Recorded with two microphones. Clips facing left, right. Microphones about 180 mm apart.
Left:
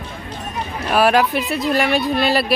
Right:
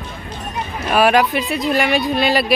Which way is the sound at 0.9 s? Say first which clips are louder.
Right 1 dB; centre (ahead or behind).